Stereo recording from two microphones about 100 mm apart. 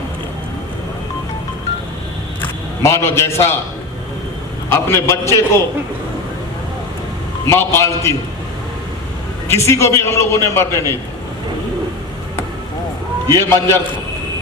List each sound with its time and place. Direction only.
2.8 s a man's voice: 25° left (ahead or behind)
4.7 s a man's voice: 25° left (ahead or behind)
7.4 s a man's voice: 25° left (ahead or behind)
9.5 s a man's voice: 25° left (ahead or behind)
13.2 s a man's voice: 25° left (ahead or behind)